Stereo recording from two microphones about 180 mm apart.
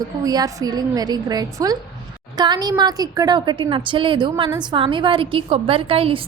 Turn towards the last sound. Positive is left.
turn(degrees=-30)  # may be behind; listen again after turning